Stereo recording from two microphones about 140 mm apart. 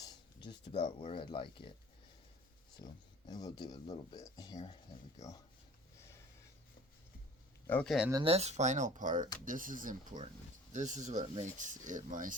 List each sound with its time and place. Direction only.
0.0 s a sound: 30° left (ahead or behind)
0.7 s speech: 45° left (ahead or behind)
2.7 s speech: 30° left (ahead or behind)
7.9 s speech: 5° right (ahead or behind)
8.2 s speech: 45° right (ahead or behind); by 12.3 s 70° right (ahead or behind)